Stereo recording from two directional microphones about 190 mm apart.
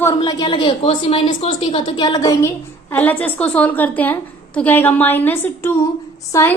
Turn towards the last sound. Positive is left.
turn(degrees=15)  # may be behind; listen again after turning